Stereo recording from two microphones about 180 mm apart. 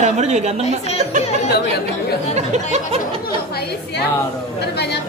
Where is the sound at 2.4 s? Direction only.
40° right (ahead or behind).